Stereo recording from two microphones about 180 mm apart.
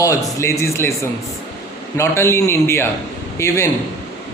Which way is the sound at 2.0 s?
15° left (ahead or behind).